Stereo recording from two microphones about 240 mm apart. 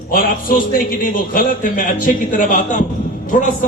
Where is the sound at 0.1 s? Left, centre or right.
Left.